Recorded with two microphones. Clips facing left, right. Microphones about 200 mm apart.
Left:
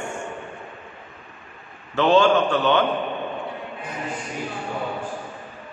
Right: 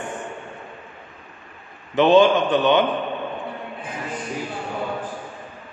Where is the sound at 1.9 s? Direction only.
20° right (ahead or behind).